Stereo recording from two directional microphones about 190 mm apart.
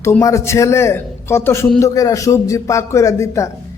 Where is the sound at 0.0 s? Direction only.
15° left (ahead or behind).